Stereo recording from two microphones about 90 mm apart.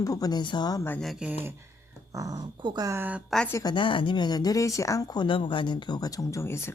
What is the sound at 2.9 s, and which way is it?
Speech, 20° right (ahead or behind).